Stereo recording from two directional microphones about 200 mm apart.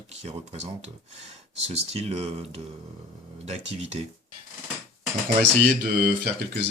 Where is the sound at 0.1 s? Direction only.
35° right (ahead or behind).